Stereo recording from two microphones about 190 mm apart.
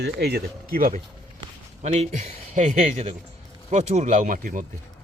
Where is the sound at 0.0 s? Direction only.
60° right (ahead or behind).